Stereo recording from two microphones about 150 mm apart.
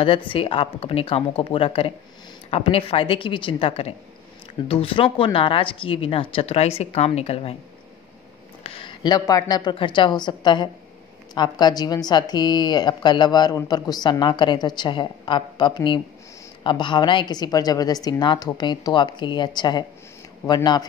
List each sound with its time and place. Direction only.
0.0 s speech: 35° left (ahead or behind)
8.6 s a woman's voice: 35° left (ahead or behind)